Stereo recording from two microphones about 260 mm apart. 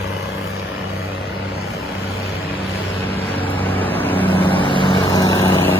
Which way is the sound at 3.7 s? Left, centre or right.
Centre.